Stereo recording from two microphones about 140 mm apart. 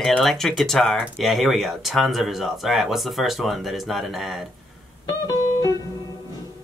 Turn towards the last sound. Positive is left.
turn(degrees=25)  # may be behind; listen again after turning